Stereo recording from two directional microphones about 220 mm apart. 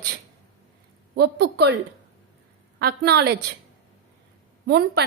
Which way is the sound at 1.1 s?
50° right (ahead or behind).